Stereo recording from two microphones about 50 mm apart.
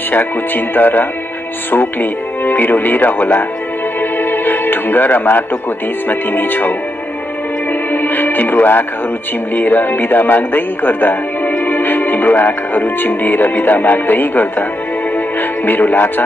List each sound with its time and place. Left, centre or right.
0.1 s speech: left
4.0 s music: left
6.0 s speech: left
7.9 s music: left
9.6 s speech: left
15.1 s music: left